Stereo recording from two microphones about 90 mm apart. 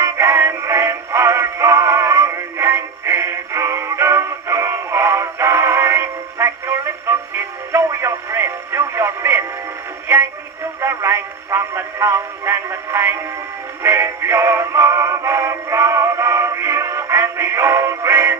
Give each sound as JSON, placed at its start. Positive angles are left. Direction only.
{"t": 0.0, "sound": "synthetic singing", "side_deg": -30}
{"t": 10.8, "sound": "music", "side_deg": -30}
{"t": 13.8, "sound": "synthetic singing", "side_deg": -30}